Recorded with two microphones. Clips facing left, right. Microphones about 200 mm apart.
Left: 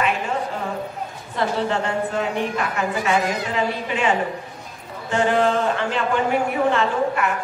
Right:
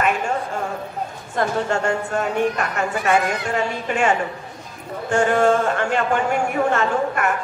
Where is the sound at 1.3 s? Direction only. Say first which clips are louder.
Right 1 dB; 45° right (ahead or behind).